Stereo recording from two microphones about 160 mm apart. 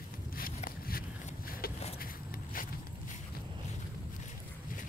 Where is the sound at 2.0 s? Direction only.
65° left (ahead or behind).